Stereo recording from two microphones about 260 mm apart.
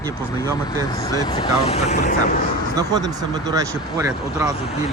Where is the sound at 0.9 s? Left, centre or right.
Centre.